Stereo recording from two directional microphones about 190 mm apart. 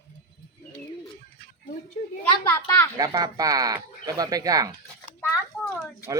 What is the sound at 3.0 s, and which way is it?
Speech, 20° right (ahead or behind).